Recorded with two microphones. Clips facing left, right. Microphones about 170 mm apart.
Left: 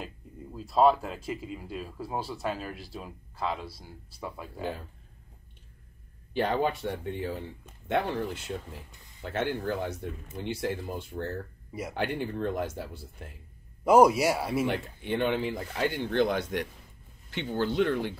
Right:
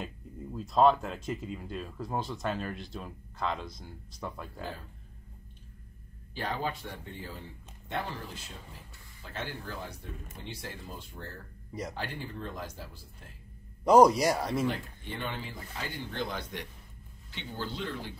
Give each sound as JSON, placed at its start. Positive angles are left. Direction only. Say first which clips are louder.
{"t": 0.0, "sound": "speech", "louder": "right 1 dB", "side_deg": 5}
{"t": 6.3, "sound": "speech", "louder": "left 7 dB", "side_deg": 65}
{"t": 13.8, "sound": "speech", "louder": "left 1 dB", "side_deg": 5}
{"t": 14.7, "sound": "speech", "louder": "left 6 dB", "side_deg": 70}